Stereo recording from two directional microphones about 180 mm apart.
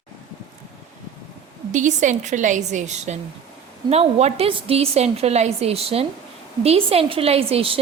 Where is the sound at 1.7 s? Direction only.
45° right (ahead or behind).